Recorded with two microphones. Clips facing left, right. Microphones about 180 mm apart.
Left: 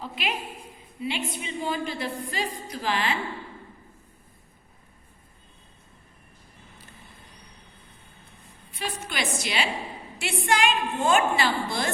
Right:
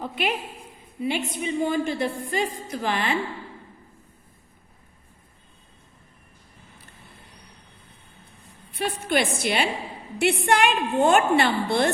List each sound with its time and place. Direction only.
0.0 s a woman's voice: 50° right (ahead or behind)
8.8 s a woman's voice: 60° right (ahead or behind)